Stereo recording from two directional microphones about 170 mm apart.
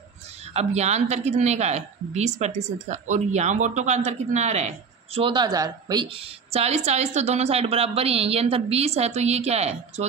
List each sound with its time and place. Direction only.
0.5 s a woman's voice: 40° right (ahead or behind)